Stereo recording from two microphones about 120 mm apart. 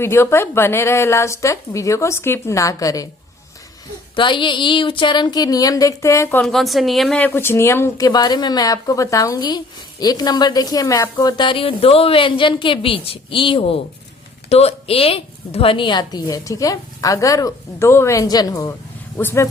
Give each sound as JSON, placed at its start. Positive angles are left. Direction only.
{"t": 0.0, "sound": "a woman's voice", "side_deg": 20}
{"t": 4.1, "sound": "speech", "side_deg": 40}
{"t": 6.4, "sound": "speech", "side_deg": 0}
{"t": 7.2, "sound": "a woman's voice", "side_deg": 15}
{"t": 19.1, "sound": "a woman's voice", "side_deg": 20}